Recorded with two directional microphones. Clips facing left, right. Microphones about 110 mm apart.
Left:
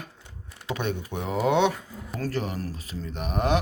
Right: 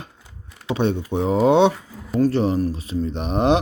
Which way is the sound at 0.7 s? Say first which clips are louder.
Right 8 dB; 25° right (ahead or behind).